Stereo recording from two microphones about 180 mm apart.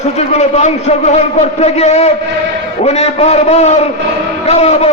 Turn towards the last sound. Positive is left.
turn(degrees=35)  # may be behind; listen again after turning